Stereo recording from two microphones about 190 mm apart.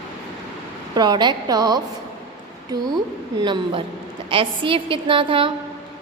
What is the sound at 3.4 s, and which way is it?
A woman's voice, 25° right (ahead or behind).